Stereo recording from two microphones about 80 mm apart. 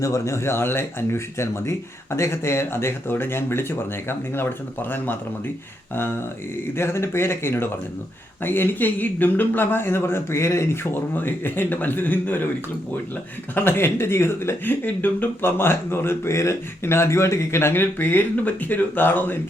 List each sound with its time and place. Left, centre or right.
0.0 s speech: left
11.2 s speech: left
13.6 s speech: left